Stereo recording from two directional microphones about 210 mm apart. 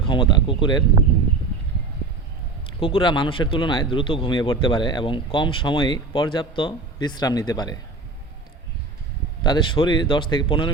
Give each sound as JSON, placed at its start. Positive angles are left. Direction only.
{"t": 0.0, "sound": "speech", "side_deg": 25}
{"t": 2.6, "sound": "speech", "side_deg": 25}
{"t": 9.4, "sound": "speech", "side_deg": 20}